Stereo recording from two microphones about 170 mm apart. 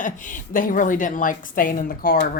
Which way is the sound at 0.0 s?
50° left (ahead or behind).